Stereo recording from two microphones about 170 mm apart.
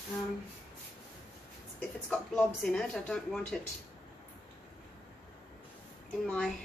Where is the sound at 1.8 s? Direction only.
5° left (ahead or behind).